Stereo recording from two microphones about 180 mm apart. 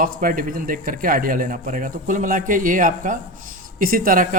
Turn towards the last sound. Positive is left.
turn(degrees=-50)  # may be behind; listen again after turning